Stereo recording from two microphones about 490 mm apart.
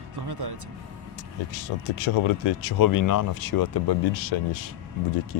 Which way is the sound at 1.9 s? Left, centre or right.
Left.